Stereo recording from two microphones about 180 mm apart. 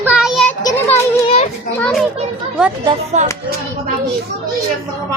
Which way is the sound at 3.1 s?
40° right (ahead or behind).